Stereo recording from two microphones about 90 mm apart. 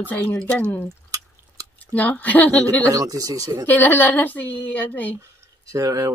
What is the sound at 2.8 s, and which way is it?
Speech, 40° right (ahead or behind).